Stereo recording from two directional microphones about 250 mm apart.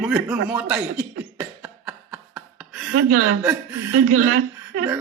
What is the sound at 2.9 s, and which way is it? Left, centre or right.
Speech, right.